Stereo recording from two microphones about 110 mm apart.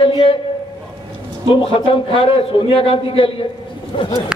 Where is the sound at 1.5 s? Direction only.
55° left (ahead or behind).